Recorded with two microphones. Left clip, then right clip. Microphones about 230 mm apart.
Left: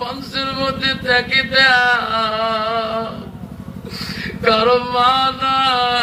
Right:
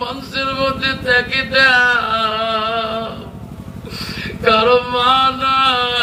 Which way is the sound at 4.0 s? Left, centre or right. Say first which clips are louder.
Right 1 dB; centre.